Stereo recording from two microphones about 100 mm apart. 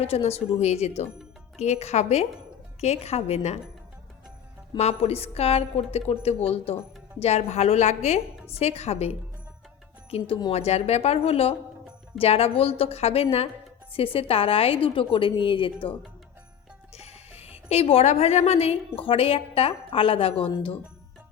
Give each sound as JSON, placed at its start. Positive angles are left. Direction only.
{"t": 0.0, "sound": "a woman's voice", "side_deg": 90}
{"t": 4.8, "sound": "a woman's voice", "side_deg": 90}
{"t": 10.1, "sound": "speech", "side_deg": 75}
{"t": 10.5, "sound": "a woman's voice", "side_deg": 90}
{"t": 13.9, "sound": "a woman's voice", "side_deg": 70}
{"t": 16.9, "sound": "speech", "side_deg": 90}